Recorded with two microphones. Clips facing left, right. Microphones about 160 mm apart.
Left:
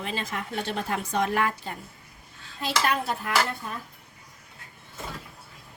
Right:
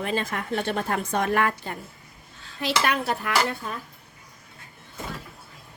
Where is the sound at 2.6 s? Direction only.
70° right (ahead or behind).